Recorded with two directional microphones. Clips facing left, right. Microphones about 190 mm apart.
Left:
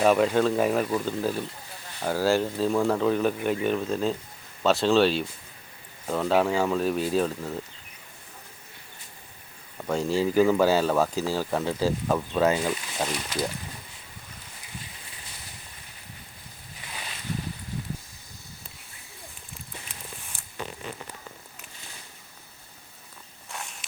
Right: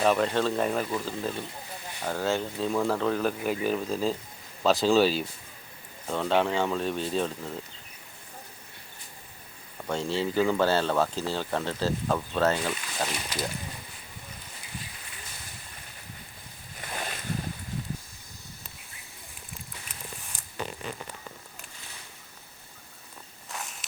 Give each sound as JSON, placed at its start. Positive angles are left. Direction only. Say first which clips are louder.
{"t": 0.0, "sound": "speech", "louder": "left 4 dB", "side_deg": 5}
{"t": 9.8, "sound": "speech", "louder": "left 4 dB", "side_deg": 5}
{"t": 16.8, "sound": "boat", "louder": "right 5 dB", "side_deg": -50}
{"t": 23.5, "sound": "walk", "louder": "even", "side_deg": 0}